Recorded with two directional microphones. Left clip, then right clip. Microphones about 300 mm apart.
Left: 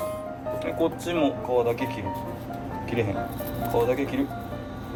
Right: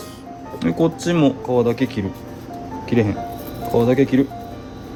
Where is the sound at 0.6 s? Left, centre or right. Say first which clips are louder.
Right 8 dB; right.